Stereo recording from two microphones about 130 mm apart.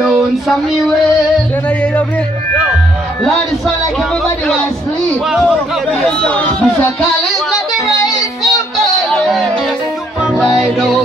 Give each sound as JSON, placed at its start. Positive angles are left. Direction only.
{"t": 0.0, "sound": "a sound", "side_deg": 0}
{"t": 5.3, "sound": "speech", "side_deg": 0}
{"t": 6.0, "sound": "speech", "side_deg": 10}
{"t": 9.1, "sound": "music", "side_deg": 5}